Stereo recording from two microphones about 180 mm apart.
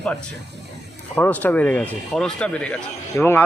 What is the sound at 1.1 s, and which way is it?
A man's voice, 10° left (ahead or behind).